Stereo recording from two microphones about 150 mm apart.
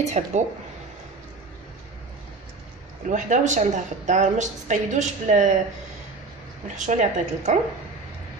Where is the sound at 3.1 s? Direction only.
55° right (ahead or behind).